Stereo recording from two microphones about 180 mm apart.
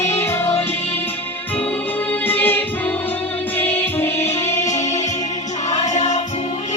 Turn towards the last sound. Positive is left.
turn(degrees=40)  # may be behind; listen again after turning